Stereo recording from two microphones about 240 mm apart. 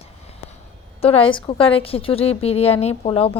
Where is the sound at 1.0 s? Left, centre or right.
Left.